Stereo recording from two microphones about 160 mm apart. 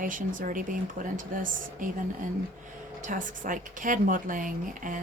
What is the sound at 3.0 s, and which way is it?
Speech, 55° right (ahead or behind).